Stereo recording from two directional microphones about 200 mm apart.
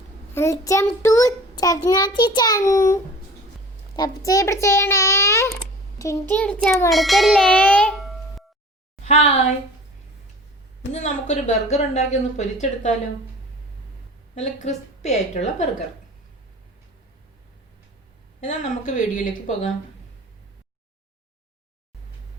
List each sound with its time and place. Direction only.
0.3 s child singing: 15° left (ahead or behind)
6.9 s a sound: centre (ahead or behind)
9.0 s a woman's voice: 35° left (ahead or behind)
10.9 s speech: 35° left (ahead or behind)
14.6 s speech: 35° left (ahead or behind)
18.3 s speech: 40° left (ahead or behind)